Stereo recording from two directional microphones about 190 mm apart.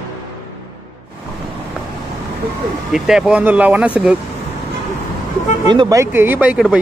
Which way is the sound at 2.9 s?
5° right (ahead or behind).